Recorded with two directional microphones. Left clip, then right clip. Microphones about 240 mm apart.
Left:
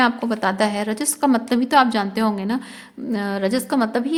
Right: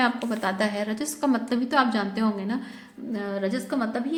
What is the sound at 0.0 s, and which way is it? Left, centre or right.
A woman's voice, left.